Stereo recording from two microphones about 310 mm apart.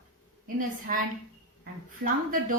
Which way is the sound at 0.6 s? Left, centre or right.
Right.